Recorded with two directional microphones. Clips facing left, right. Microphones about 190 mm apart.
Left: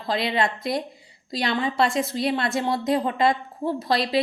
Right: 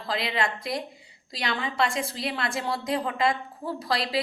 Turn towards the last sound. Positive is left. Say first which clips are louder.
# left 5 dB
turn(degrees=25)  # may be behind; listen again after turning